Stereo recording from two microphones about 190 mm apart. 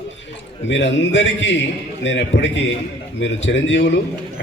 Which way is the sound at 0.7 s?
70° left (ahead or behind).